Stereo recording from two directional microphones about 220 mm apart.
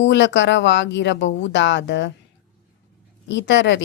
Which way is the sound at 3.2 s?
55° left (ahead or behind).